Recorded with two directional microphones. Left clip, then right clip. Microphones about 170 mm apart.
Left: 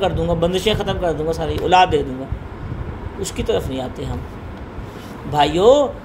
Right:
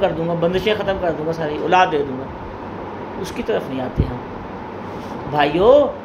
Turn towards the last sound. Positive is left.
turn(degrees=65)  # may be behind; listen again after turning